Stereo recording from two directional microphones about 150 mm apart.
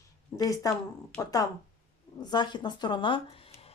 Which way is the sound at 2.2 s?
30° left (ahead or behind).